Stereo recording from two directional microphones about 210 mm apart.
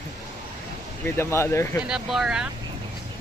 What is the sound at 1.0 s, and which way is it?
Speech, 10° left (ahead or behind).